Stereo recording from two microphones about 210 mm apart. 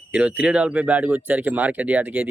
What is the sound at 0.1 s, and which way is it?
Speech, 5° right (ahead or behind).